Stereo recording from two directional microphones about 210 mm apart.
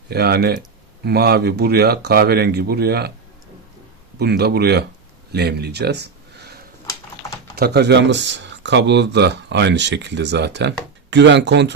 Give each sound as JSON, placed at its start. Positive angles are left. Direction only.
{"t": 0.1, "sound": "speech", "side_deg": -50}
{"t": 4.2, "sound": "speech", "side_deg": -50}
{"t": 7.5, "sound": "speech", "side_deg": -50}